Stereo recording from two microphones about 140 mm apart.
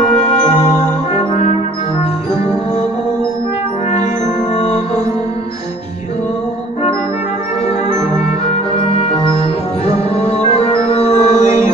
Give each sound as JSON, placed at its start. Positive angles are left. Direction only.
{"t": 10.2, "sound": "music", "side_deg": 45}